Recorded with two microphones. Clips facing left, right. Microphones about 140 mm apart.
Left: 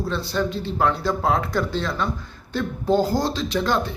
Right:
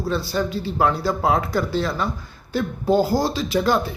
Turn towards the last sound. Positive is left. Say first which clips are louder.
# right 2 dB
turn(degrees=-5)  # may be behind; listen again after turning